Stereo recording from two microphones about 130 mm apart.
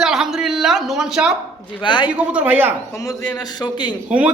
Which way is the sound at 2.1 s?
10° right (ahead or behind).